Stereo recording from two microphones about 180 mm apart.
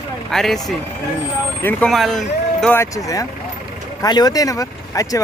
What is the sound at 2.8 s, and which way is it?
Speech, 20° left (ahead or behind).